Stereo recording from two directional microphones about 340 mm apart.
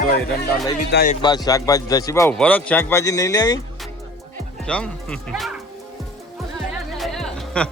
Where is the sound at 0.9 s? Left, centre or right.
Left.